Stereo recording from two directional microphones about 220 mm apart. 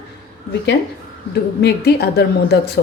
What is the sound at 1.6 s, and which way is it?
A woman's voice, 50° left (ahead or behind).